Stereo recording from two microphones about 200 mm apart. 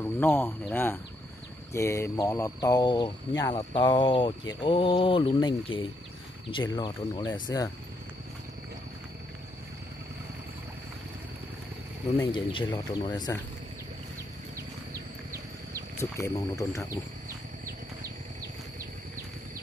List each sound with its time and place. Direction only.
0.0 s speech: 10° left (ahead or behind)
12.3 s speech: 25° left (ahead or behind)
16.0 s speech: 15° left (ahead or behind)